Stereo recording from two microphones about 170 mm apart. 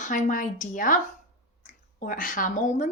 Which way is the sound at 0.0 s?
50° left (ahead or behind).